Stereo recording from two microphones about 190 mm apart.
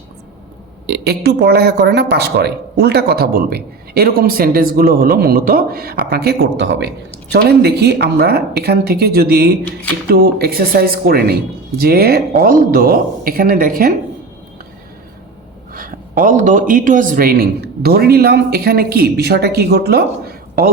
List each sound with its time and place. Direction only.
0.9 s a man's voice: 60° right (ahead or behind)
15.7 s a man's voice: 45° right (ahead or behind)